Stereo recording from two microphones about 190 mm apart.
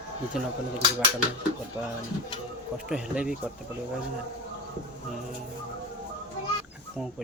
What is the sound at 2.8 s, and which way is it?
Speech, 5° right (ahead or behind).